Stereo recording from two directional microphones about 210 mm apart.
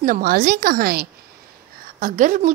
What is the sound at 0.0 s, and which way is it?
A woman's voice, 40° right (ahead or behind).